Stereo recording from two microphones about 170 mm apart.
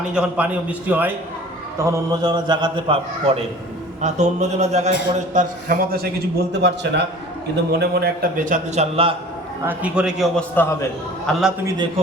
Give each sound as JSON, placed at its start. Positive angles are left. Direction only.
{"t": 0.0, "sound": "a man's voice", "side_deg": -5}
{"t": 1.8, "sound": "mantra", "side_deg": -20}
{"t": 4.0, "sound": "a man's voice", "side_deg": -45}
{"t": 5.3, "sound": "a man's voice", "side_deg": -50}
{"t": 6.5, "sound": "a man's voice", "side_deg": -85}
{"t": 7.5, "sound": "a man's voice", "side_deg": -75}
{"t": 9.6, "sound": "a man's voice", "side_deg": -5}
{"t": 10.5, "sound": "a man's voice", "side_deg": 15}
{"t": 11.3, "sound": "a man's voice", "side_deg": 0}